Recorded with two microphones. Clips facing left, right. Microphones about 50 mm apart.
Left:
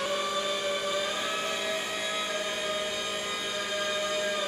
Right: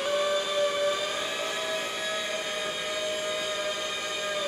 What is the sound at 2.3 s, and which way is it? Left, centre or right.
Civil defense siren, centre.